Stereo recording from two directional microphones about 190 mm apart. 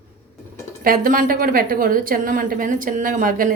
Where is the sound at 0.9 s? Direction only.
45° right (ahead or behind).